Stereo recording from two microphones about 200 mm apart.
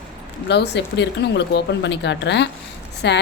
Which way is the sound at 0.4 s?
60° left (ahead or behind).